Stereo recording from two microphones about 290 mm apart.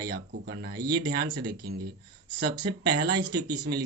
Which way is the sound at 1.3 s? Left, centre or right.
Right.